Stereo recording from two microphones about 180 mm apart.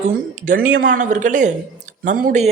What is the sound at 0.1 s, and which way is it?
Speech, 50° right (ahead or behind).